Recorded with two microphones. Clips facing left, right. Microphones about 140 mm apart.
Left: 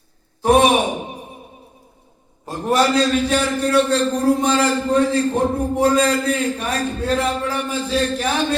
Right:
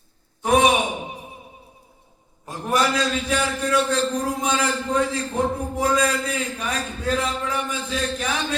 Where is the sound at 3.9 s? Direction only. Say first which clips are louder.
Left 6 dB; 65° left (ahead or behind).